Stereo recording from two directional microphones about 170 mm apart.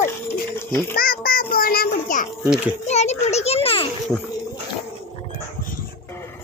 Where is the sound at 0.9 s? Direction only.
60° left (ahead or behind).